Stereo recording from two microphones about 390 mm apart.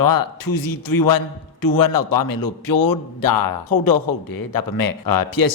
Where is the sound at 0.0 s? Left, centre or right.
Left.